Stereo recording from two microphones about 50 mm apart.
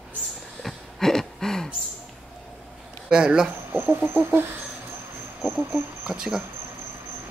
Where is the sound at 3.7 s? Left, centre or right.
Right.